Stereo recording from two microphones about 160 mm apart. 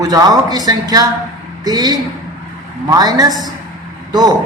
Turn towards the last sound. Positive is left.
turn(degrees=-25)  # may be behind; listen again after turning